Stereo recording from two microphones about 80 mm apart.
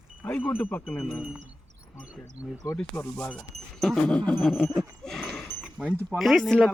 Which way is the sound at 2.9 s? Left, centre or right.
Centre.